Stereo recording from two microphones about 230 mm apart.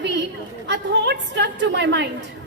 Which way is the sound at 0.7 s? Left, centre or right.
Right.